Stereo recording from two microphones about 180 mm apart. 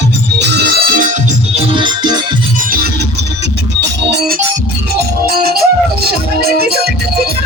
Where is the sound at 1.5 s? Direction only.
30° right (ahead or behind).